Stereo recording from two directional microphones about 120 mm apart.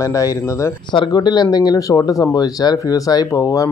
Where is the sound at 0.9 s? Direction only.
35° left (ahead or behind).